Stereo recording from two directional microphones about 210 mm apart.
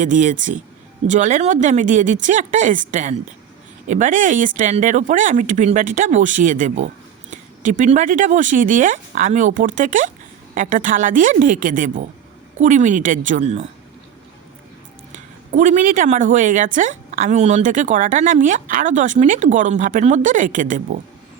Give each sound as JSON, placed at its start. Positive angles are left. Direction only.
{"t": 0.0, "sound": "speech", "side_deg": -35}
{"t": 15.1, "sound": "speech", "side_deg": -35}